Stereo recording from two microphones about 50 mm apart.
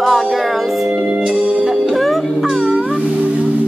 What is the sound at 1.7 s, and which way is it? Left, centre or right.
Music, centre.